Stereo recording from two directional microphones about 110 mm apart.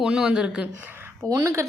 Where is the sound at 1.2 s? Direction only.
30° right (ahead or behind).